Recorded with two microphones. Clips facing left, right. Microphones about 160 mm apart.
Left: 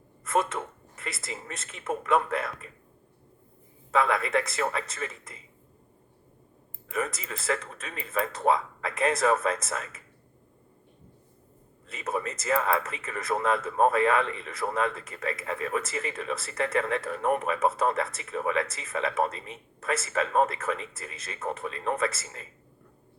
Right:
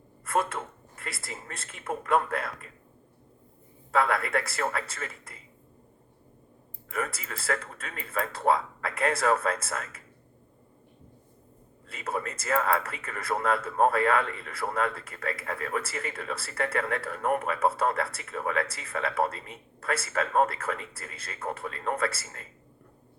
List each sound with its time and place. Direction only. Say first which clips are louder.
0.3 s speech: left 1 dB; 20° left (ahead or behind)
3.9 s speech: left 1 dB; 20° left (ahead or behind)
6.9 s speech: left 2 dB; 20° left (ahead or behind)
11.9 s speech: left 1 dB; 20° left (ahead or behind)